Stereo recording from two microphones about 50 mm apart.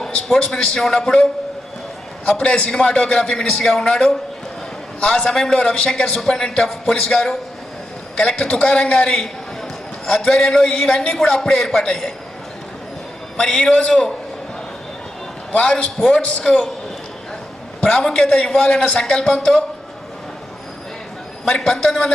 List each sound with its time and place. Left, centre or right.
0.3 s a man's voice: left
2.4 s a man's voice: centre
13.3 s a man's voice: centre
15.5 s a man's voice: centre
17.7 s a man's voice: centre
21.4 s a man's voice: centre